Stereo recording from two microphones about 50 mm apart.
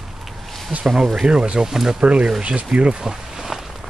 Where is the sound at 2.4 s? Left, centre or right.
Right.